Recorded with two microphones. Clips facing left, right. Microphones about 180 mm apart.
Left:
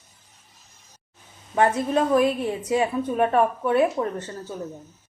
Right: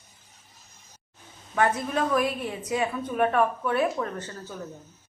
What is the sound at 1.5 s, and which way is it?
A woman's voice, 25° left (ahead or behind).